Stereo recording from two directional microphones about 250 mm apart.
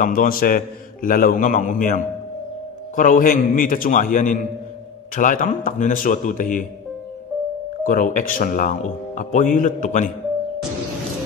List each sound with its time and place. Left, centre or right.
0.0 s speech: left
3.0 s speech: left
7.8 s speech: left